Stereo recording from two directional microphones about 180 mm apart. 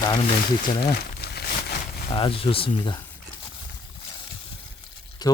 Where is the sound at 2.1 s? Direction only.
30° left (ahead or behind).